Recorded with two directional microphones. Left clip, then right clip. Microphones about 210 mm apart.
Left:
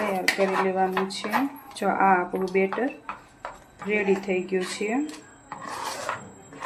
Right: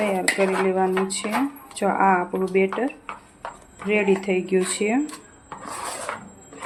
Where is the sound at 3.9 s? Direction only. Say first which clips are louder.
Right 3 dB; 20° right (ahead or behind).